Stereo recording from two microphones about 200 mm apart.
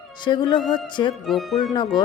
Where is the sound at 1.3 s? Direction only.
Centre (ahead or behind).